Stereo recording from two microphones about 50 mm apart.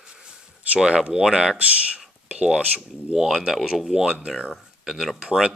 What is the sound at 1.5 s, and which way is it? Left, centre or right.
Speech, right.